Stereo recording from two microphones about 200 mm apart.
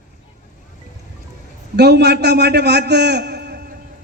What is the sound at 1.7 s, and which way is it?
Speech, 55° right (ahead or behind).